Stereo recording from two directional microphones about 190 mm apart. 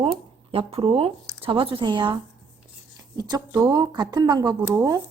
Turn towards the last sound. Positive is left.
turn(degrees=-15)  # may be behind; listen again after turning